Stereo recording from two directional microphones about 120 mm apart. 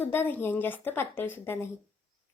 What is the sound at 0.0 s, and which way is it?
A woman's voice, 15° left (ahead or behind).